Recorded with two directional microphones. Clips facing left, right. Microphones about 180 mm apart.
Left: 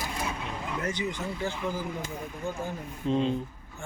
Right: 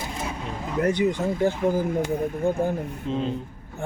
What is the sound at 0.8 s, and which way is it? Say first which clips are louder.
Speech: right 12 dB; 60° right (ahead or behind).